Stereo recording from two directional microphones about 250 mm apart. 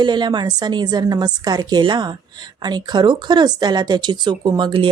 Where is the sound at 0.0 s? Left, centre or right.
Centre.